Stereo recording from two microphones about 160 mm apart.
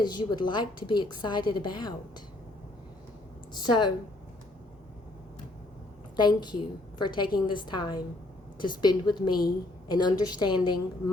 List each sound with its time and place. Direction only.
0.0 s a woman's voice: 25° left (ahead or behind)
3.5 s a woman's voice: 30° left (ahead or behind)
6.1 s a woman's voice: 25° left (ahead or behind)